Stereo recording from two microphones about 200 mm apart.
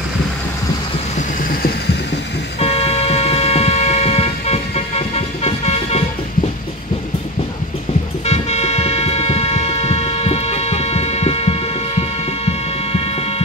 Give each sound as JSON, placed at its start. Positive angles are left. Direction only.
{"t": 1.1, "sound": "vehicle", "side_deg": 50}
{"t": 2.6, "sound": "vehicle", "side_deg": 30}
{"t": 8.3, "sound": "music", "side_deg": 35}